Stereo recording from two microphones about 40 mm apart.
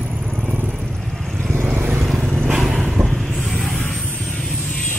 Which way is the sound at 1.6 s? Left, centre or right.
Right.